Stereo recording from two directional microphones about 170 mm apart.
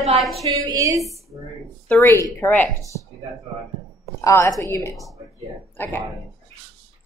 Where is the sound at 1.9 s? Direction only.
10° left (ahead or behind).